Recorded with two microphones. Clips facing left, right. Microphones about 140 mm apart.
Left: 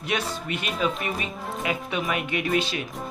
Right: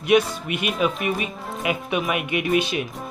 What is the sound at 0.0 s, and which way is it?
Speech, 15° right (ahead or behind).